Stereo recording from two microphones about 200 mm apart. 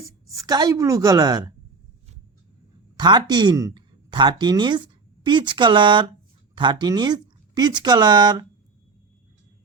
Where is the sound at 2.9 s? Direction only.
20° right (ahead or behind).